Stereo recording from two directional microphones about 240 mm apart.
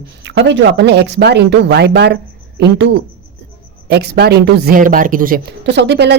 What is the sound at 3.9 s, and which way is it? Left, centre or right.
Speech, right.